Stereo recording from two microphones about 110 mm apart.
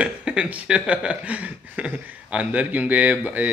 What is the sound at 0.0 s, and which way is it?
Speech, 10° right (ahead or behind).